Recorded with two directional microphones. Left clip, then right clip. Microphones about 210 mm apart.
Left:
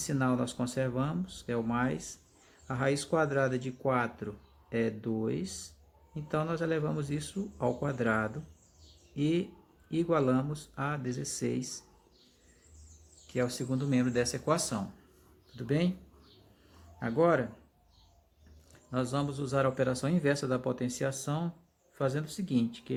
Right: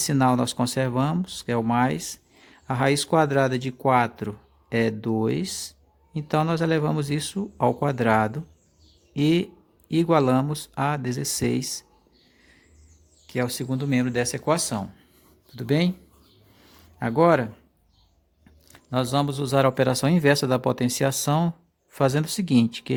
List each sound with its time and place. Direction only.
0.0 s speech: 50° right (ahead or behind)
13.2 s speech: 45° right (ahead or behind)
17.0 s speech: 50° right (ahead or behind)
18.7 s speech: 50° right (ahead or behind)